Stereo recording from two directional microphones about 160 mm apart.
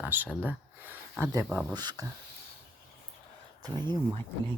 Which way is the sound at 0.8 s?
15° right (ahead or behind).